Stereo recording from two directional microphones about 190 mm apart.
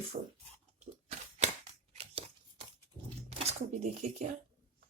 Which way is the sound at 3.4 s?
35° right (ahead or behind).